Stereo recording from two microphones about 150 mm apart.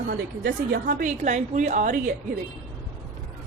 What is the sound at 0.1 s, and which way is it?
Speech, 90° right.